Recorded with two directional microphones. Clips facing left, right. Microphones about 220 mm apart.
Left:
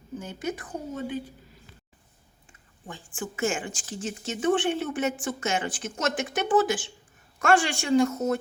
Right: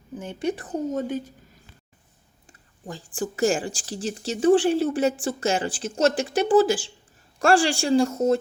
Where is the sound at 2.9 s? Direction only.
35° right (ahead or behind).